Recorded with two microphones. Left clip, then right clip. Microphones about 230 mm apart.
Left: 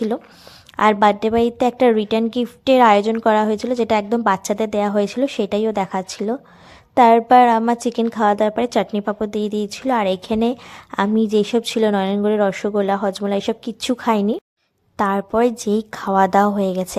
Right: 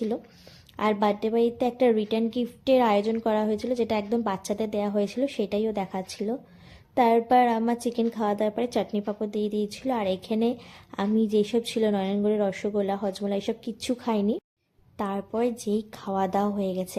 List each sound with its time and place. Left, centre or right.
0.8 s a woman's voice: left